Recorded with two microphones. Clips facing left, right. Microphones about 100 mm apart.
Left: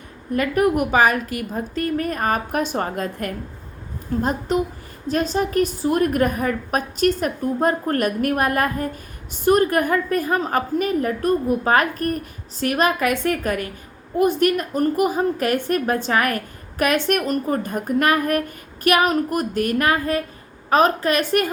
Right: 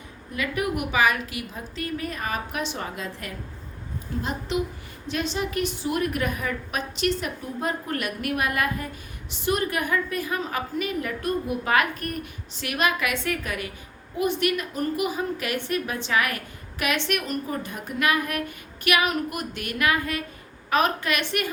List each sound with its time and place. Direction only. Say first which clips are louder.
0.3 s a woman's voice: left 9 dB; 45° left (ahead or behind)